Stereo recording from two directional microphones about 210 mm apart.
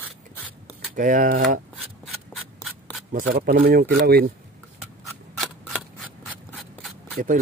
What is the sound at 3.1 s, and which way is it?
Speech, 40° right (ahead or behind).